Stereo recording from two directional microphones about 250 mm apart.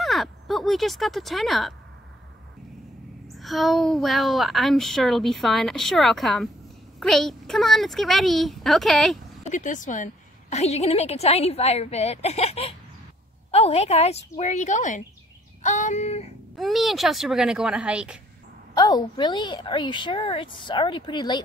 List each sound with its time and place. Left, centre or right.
0.0 s speech: centre
3.3 s speech: centre
9.5 s a woman's voice: left
16.5 s speech: centre
18.8 s a woman's voice: centre